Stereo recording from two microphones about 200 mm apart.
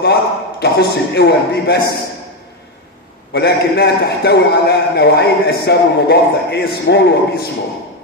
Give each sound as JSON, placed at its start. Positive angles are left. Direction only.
{"t": 0.0, "sound": "a man's voice", "side_deg": 55}
{"t": 3.3, "sound": "a man's voice", "side_deg": 55}